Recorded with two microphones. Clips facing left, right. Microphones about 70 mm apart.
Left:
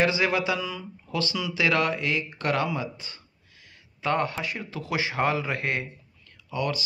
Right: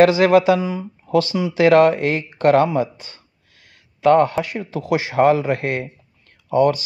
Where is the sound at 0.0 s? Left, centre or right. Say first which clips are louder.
Right 11 dB; right.